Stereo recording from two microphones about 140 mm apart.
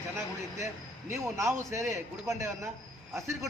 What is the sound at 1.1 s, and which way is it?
A man's voice, 20° right (ahead or behind).